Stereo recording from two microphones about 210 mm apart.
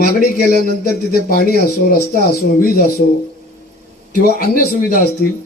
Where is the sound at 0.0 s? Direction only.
45° left (ahead or behind).